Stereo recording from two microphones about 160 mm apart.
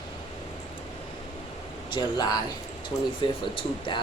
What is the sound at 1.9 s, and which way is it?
Speech, 25° left (ahead or behind).